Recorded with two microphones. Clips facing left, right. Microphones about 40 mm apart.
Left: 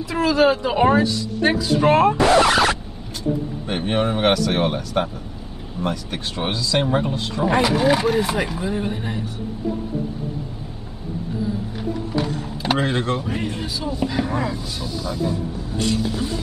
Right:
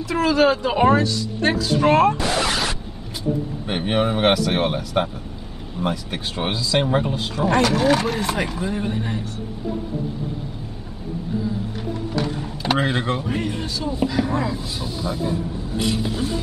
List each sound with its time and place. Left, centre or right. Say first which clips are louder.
0.1 s speech: even; centre
2.1 s speech: left 7 dB; left
3.6 s speech: even; centre
12.7 s speech: even; centre
14.6 s speech: even; centre
15.8 s vehicle: left 1 dB; centre